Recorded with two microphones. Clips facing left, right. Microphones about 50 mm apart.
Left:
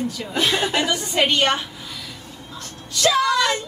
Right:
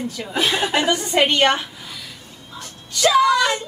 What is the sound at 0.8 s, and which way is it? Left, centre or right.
Speech, right.